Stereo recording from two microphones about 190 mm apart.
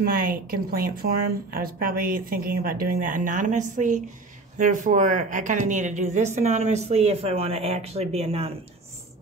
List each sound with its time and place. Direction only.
0.0 s a woman's voice: 50° right (ahead or behind); by 8.5 s 30° right (ahead or behind)